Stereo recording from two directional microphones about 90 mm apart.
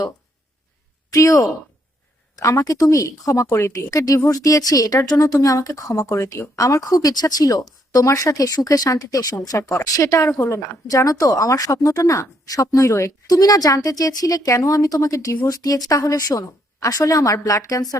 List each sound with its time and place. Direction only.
1.1 s speech: 40° left (ahead or behind)